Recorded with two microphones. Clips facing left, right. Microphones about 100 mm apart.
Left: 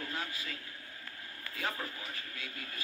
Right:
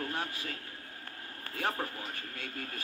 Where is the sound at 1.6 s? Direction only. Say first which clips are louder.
Right 4 dB; 50° right (ahead or behind).